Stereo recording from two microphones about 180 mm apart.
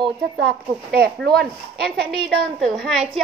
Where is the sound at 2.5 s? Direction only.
Centre (ahead or behind).